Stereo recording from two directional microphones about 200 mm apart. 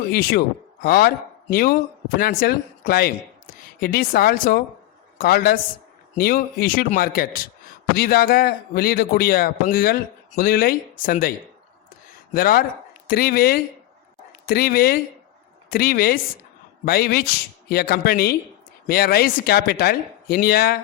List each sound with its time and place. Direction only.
0.1 s a man's voice: 50° left (ahead or behind)
12.3 s a man's voice: 45° left (ahead or behind)